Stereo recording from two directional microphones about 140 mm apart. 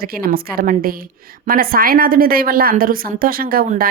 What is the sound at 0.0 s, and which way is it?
A woman's voice, 90° right.